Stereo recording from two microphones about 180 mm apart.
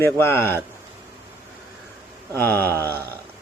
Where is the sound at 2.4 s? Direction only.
10° left (ahead or behind).